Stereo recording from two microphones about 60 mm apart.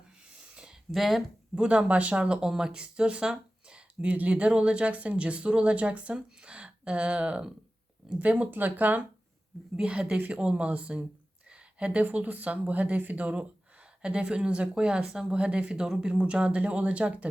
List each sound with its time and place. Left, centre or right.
0.5 s a sound: centre
0.9 s speech: centre
1.5 s speech: centre
9.7 s speech: centre
11.4 s a sound: centre
11.9 s speech: right